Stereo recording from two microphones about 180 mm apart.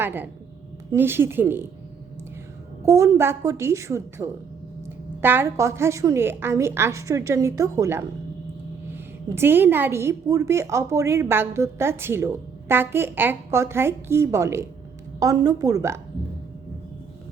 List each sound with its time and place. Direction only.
0.0 s a woman's voice: 10° right (ahead or behind)
2.8 s a woman's voice: 15° right (ahead or behind)